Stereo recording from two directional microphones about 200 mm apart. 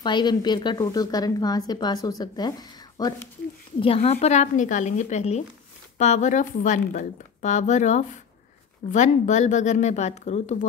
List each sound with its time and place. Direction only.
0.0 s a woman's voice: 20° left (ahead or behind)
3.8 s a woman's voice: 30° left (ahead or behind)